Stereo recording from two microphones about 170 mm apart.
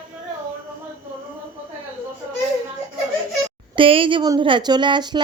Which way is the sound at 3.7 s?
30° right (ahead or behind).